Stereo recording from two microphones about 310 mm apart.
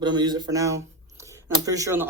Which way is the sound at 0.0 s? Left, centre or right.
Centre.